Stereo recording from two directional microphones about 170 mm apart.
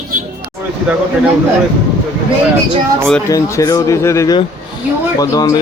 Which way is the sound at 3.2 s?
20° left (ahead or behind).